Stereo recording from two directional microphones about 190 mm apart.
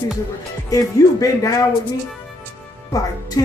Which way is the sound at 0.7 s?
20° left (ahead or behind).